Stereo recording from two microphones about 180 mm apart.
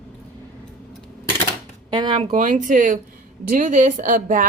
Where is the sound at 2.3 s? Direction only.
45° right (ahead or behind).